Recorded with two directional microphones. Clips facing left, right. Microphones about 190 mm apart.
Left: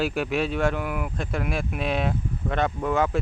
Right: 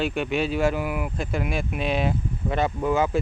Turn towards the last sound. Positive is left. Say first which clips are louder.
# right 1 dB
turn(degrees=-5)  # may be behind; listen again after turning